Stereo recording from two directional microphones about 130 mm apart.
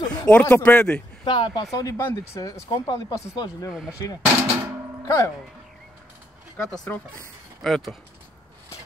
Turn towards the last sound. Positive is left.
turn(degrees=0)  # may be behind; listen again after turning